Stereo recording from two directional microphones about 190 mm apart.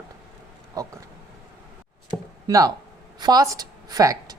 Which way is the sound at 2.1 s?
20° right (ahead or behind).